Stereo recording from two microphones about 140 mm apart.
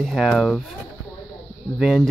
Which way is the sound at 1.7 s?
Centre (ahead or behind).